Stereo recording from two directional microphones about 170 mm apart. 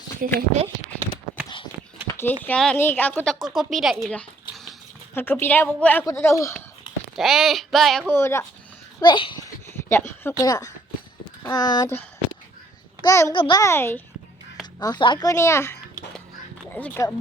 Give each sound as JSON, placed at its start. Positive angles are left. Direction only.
{"t": 0.2, "sound": "speech", "side_deg": -55}
{"t": 2.5, "sound": "a woman's voice", "side_deg": 5}
{"t": 3.3, "sound": "a woman's voice", "side_deg": 0}
{"t": 7.2, "sound": "a sound", "side_deg": 0}
{"t": 8.1, "sound": "a woman's voice", "side_deg": 15}
{"t": 9.0, "sound": "a child's voice", "side_deg": 25}
{"t": 9.9, "sound": "a woman's voice", "side_deg": 15}
{"t": 13.0, "sound": "a child's voice", "side_deg": 20}
{"t": 14.8, "sound": "a woman's voice", "side_deg": 25}